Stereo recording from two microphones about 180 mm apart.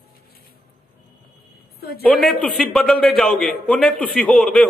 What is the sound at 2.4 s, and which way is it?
A man's voice, centre (ahead or behind).